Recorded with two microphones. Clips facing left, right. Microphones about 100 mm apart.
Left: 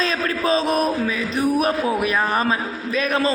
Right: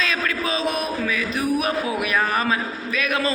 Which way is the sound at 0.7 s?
35° left (ahead or behind).